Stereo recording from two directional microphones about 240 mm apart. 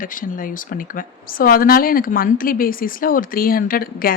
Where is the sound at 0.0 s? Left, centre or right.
Left.